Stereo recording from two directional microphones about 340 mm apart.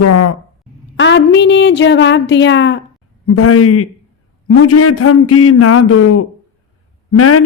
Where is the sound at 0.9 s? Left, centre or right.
Left.